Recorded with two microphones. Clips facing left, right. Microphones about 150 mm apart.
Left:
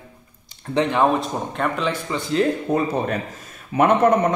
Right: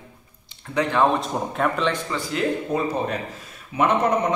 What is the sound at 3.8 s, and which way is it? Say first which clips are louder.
Speech: left 4 dB; 55° left (ahead or behind).